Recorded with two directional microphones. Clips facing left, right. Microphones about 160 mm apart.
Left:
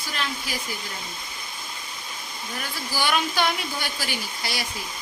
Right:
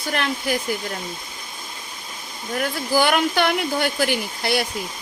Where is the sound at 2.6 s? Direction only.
55° right (ahead or behind).